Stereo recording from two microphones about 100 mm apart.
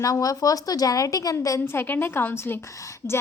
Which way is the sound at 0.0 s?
35° left (ahead or behind).